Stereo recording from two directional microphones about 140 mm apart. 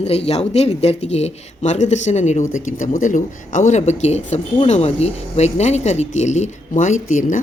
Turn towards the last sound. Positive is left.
turn(degrees=60)  # may be behind; listen again after turning